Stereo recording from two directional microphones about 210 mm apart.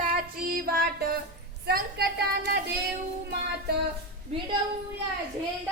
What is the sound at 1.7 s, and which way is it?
Speech, 50° right (ahead or behind).